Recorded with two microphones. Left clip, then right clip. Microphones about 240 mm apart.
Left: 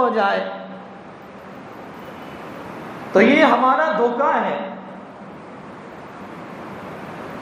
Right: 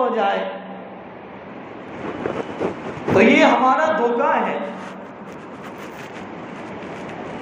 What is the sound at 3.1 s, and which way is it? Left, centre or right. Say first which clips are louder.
Speech: even; left.